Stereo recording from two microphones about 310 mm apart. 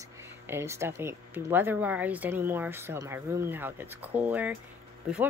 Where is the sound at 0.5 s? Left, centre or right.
Centre.